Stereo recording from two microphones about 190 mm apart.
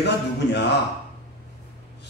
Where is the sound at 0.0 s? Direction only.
60° left (ahead or behind).